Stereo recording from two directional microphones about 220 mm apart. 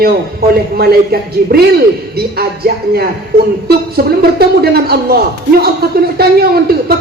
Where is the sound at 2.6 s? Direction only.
40° right (ahead or behind).